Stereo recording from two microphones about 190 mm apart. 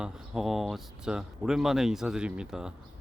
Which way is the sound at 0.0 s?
Centre (ahead or behind).